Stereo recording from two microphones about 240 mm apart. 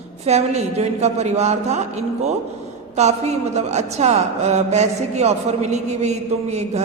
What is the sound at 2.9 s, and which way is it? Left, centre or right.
A woman's voice, right.